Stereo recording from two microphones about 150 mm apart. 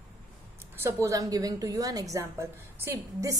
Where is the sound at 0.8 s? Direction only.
20° right (ahead or behind).